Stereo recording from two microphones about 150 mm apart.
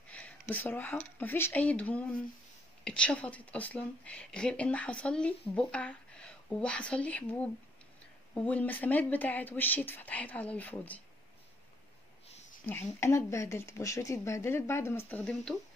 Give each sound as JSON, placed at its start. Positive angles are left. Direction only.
{"t": 0.1, "sound": "a woman's voice", "side_deg": 10}
{"t": 12.6, "sound": "a woman's voice", "side_deg": 15}